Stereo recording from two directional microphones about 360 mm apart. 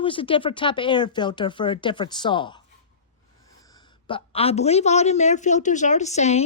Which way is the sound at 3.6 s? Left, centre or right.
Centre.